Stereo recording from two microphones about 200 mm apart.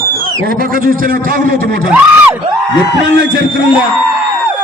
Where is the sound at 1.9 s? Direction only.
10° right (ahead or behind).